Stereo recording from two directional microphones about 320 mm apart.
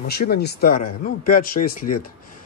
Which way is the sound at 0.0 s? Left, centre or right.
Left.